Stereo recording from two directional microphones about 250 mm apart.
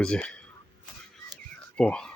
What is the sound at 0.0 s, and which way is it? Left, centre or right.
Speech, centre.